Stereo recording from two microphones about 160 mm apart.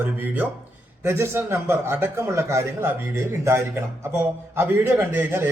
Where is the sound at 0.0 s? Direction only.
10° right (ahead or behind).